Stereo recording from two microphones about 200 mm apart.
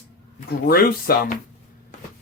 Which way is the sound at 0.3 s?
50° left (ahead or behind).